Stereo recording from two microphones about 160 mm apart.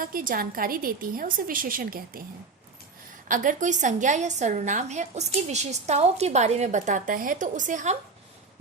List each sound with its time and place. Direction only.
0.0 s a woman's voice: 60° right (ahead or behind)
3.2 s a woman's voice: 55° right (ahead or behind)